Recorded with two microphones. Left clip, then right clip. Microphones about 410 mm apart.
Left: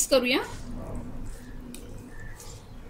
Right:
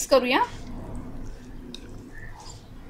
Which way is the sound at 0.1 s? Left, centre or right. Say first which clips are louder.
Right 3 dB; centre.